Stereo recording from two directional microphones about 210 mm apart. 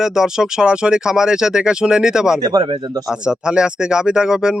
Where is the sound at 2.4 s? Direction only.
20° right (ahead or behind).